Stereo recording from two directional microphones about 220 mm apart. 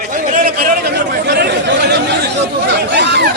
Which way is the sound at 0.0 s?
40° right (ahead or behind).